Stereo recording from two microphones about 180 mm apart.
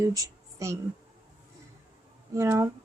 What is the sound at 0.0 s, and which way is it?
Speech, 20° right (ahead or behind).